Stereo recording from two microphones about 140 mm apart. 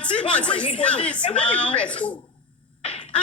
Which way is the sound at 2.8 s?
45° left (ahead or behind).